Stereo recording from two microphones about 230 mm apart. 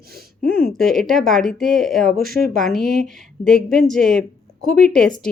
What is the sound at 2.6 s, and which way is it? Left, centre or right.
Speech, centre.